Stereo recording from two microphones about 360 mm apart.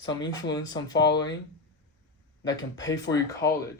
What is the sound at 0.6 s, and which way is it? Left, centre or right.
Speech, centre.